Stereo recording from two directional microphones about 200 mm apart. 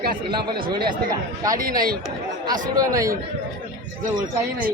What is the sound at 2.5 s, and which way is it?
Speech, 20° right (ahead or behind).